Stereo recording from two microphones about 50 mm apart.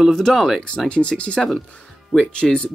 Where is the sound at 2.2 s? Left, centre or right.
Left.